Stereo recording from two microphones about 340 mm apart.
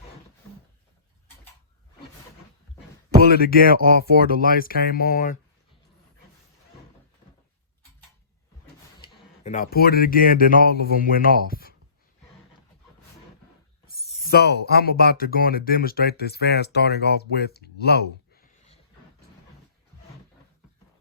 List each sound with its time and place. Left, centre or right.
3.2 s speech: left
9.0 s speech: left
14.1 s speech: left